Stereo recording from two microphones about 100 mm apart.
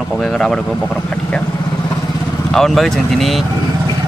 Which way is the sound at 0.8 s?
10° left (ahead or behind).